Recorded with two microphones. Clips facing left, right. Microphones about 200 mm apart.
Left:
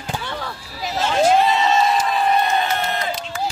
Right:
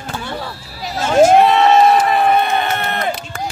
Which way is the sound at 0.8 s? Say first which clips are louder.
Right 6 dB; 45° right (ahead or behind).